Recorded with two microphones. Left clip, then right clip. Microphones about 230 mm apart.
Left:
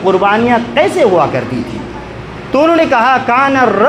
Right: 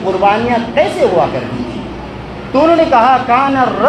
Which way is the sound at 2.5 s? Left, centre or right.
Left.